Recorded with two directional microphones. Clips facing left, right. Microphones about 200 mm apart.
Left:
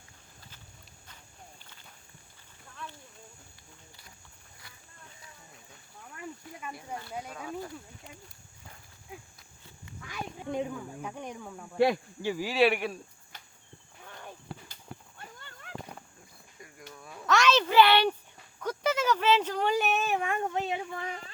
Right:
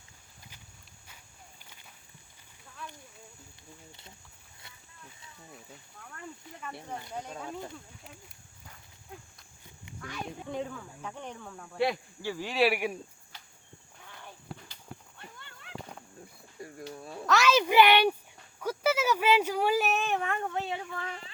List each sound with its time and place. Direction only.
6.1 s cricket: 10° left (ahead or behind)
7.3 s speech: 25° right (ahead or behind)
10.5 s speech: 15° left (ahead or behind)
12.5 s speech: centre (ahead or behind)
15.4 s a sound: 45° left (ahead or behind)
16.6 s cricket: 30° right (ahead or behind)
17.2 s a sound: 5° right (ahead or behind); by 21.2 s 15° left (ahead or behind)